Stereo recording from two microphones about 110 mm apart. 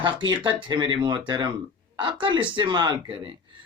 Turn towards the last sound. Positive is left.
turn(degrees=-50)  # may be behind; listen again after turning